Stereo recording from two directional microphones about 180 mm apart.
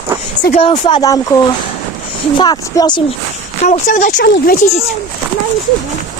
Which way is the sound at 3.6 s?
45° left (ahead or behind).